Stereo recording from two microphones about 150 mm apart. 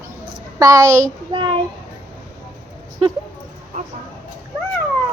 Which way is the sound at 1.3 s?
35° right (ahead or behind).